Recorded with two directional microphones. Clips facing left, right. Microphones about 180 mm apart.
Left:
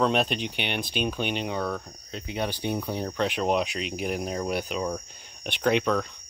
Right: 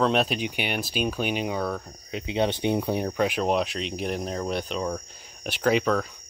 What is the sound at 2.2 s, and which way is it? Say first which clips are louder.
Speech: right 5 dB; 25° right (ahead or behind).